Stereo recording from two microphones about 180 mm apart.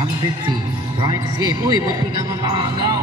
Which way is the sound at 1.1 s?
20° right (ahead or behind).